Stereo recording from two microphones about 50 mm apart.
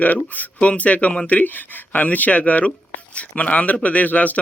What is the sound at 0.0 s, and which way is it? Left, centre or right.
Speech, left.